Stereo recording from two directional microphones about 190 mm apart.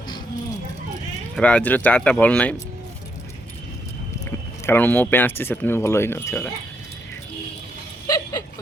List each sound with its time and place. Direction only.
1.4 s speech: 5° left (ahead or behind)
4.3 s speech: 10° left (ahead or behind)
8.0 s a sound: 20° left (ahead or behind)